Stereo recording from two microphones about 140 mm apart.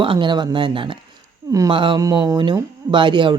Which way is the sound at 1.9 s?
25° right (ahead or behind).